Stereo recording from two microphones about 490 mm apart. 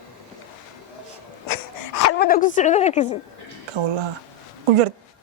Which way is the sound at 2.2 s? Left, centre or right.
Centre.